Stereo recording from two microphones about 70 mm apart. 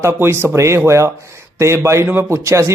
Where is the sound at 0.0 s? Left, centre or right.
Right.